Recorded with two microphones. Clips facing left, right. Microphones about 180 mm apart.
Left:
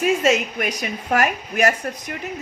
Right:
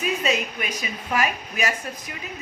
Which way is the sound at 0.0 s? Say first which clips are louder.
Left 6 dB; 80° left.